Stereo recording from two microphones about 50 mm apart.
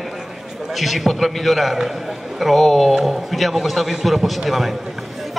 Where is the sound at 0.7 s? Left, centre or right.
Centre.